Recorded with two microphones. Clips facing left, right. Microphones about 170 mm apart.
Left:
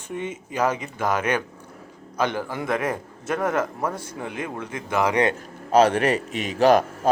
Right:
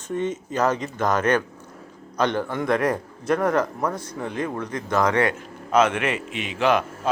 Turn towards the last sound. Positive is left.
turn(degrees=40)  # may be behind; listen again after turning